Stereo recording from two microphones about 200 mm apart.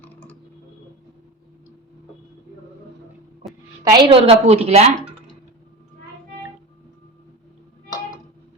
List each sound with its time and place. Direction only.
0.0 s creak: 10° left (ahead or behind)
3.8 s a woman's voice: 25° right (ahead or behind)